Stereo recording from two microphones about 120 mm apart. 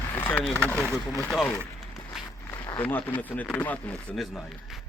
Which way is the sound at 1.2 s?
10° left (ahead or behind).